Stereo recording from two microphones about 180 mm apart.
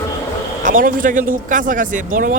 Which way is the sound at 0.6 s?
50° right (ahead or behind).